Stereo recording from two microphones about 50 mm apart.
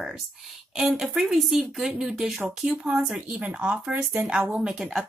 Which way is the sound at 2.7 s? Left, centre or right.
Right.